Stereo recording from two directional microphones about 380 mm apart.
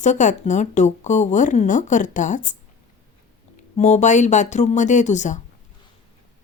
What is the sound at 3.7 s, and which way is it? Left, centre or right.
Speech, centre.